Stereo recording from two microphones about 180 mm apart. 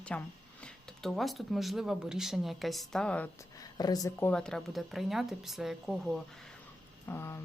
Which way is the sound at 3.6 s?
20° left (ahead or behind).